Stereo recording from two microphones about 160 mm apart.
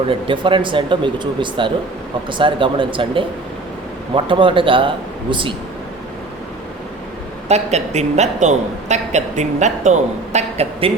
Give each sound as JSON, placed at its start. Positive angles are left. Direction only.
{"t": 0.1, "sound": "speech", "side_deg": -30}
{"t": 7.4, "sound": "a woman's voice", "side_deg": -45}